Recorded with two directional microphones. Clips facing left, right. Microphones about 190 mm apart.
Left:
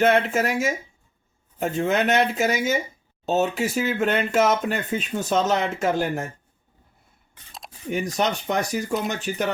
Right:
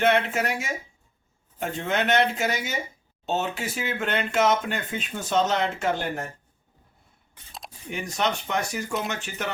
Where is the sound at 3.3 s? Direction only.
40° left (ahead or behind).